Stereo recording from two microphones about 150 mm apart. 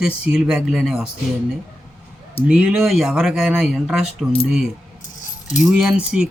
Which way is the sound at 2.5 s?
5° right (ahead or behind).